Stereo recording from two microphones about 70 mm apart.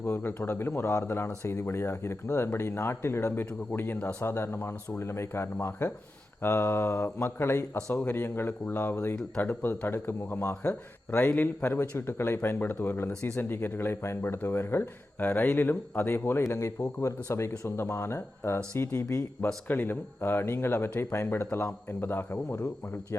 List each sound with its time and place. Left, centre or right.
0.0 s speech: left
3.7 s speech: left
7.8 s a man's voice: centre
8.0 s a man's voice: left
11.7 s speech: left
16.5 s speech: left